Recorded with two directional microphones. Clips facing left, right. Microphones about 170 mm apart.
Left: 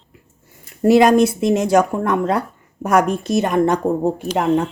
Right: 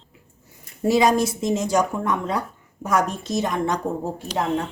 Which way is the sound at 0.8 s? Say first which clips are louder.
Left 6 dB; 60° left (ahead or behind).